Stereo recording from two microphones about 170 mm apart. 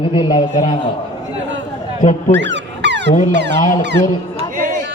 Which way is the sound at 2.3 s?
90° right.